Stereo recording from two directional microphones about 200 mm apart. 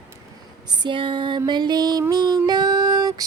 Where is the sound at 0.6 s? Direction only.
25° right (ahead or behind).